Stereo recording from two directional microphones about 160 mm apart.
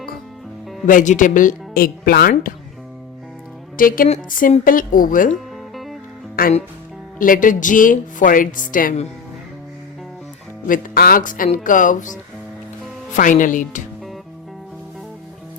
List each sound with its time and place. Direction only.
0.9 s speech: 55° left (ahead or behind)
3.8 s speech: 60° left (ahead or behind)
5.3 s music: centre (ahead or behind)
6.4 s speech: 65° left (ahead or behind)
10.7 s speech: 65° left (ahead or behind)
13.1 s speech: 50° left (ahead or behind)